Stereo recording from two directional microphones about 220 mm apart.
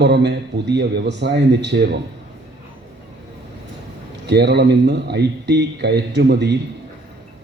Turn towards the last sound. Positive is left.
turn(degrees=-50)  # may be behind; listen again after turning